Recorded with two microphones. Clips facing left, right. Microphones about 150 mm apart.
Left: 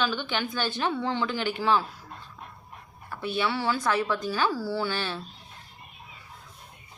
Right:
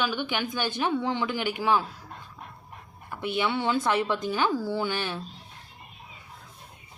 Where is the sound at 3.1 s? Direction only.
15° right (ahead or behind).